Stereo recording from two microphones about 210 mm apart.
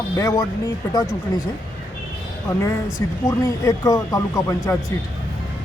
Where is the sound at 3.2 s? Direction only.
15° left (ahead or behind).